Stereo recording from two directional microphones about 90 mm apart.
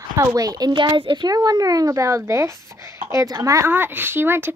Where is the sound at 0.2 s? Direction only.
40° right (ahead or behind).